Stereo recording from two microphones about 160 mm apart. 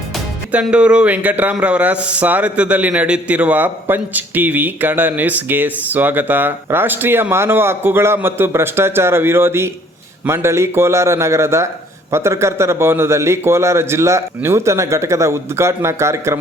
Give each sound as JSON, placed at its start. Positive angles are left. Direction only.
{"t": 0.5, "sound": "a man's voice", "side_deg": -5}